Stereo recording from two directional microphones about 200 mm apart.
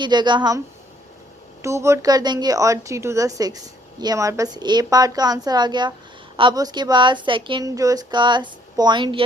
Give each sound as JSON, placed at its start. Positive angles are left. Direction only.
{"t": 0.0, "sound": "a woman's voice", "side_deg": -20}
{"t": 1.6, "sound": "a woman's voice", "side_deg": -15}